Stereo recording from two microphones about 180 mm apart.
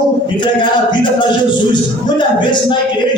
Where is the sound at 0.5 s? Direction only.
25° left (ahead or behind).